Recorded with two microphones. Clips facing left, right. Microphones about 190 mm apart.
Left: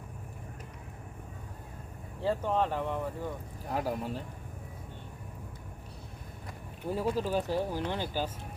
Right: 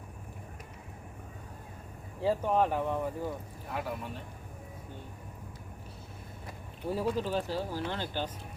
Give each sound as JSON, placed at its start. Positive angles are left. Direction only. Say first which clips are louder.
{"t": 2.2, "sound": "speech", "louder": "right 2 dB", "side_deg": -10}
{"t": 3.7, "sound": "speech", "louder": "left 4 dB", "side_deg": 40}
{"t": 6.9, "sound": "speech", "louder": "left 1 dB", "side_deg": 5}